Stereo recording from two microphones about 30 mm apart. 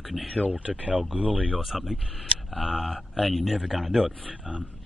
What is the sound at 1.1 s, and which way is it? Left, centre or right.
Speech, right.